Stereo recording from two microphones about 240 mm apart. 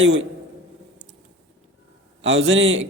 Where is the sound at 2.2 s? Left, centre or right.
Right.